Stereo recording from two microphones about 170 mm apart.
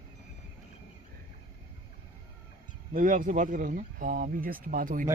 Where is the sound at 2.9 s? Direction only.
50° right (ahead or behind).